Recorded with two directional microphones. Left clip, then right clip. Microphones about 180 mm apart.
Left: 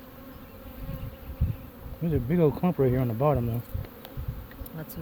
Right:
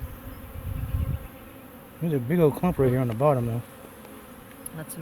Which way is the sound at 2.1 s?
10° right (ahead or behind).